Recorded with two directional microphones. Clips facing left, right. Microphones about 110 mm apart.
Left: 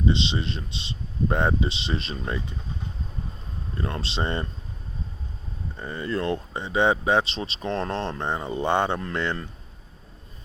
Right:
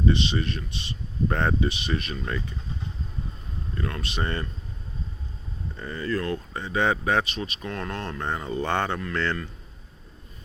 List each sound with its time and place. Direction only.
0.0 s speech: 20° left (ahead or behind)
3.8 s speech: 25° left (ahead or behind)
5.7 s speech: 20° left (ahead or behind)